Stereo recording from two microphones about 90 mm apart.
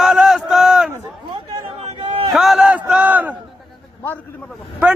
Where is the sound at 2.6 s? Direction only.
15° right (ahead or behind).